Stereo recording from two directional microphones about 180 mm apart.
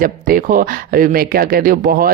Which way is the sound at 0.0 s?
50° right (ahead or behind).